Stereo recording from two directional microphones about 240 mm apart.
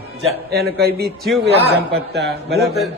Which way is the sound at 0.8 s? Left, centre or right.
Right.